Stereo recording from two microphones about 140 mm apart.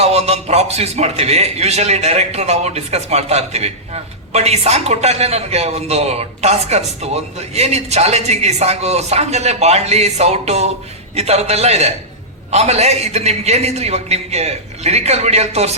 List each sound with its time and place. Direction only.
0.0 s a man's voice: 50° right (ahead or behind)